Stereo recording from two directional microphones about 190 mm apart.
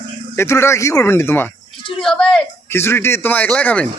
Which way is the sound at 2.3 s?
15° left (ahead or behind).